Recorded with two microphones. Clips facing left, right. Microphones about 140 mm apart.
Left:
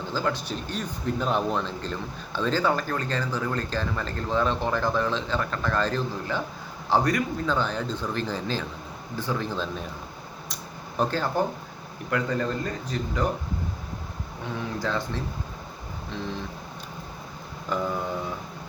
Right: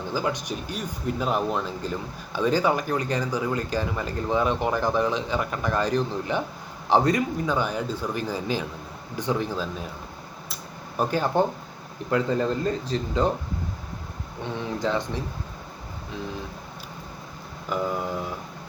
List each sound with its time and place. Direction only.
0.1 s speech: 15° right (ahead or behind)
10.5 s a sound: 10° right (ahead or behind)
12.1 s speech: 25° right (ahead or behind)
14.8 s speech: 20° right (ahead or behind)
17.7 s speech: 5° right (ahead or behind)